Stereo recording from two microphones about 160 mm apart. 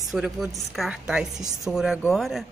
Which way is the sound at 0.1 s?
5° right (ahead or behind).